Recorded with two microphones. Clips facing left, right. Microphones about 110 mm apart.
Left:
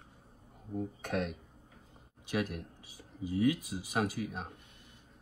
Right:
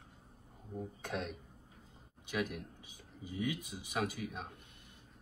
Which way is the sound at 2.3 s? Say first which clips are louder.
Left 3 dB; 40° left (ahead or behind).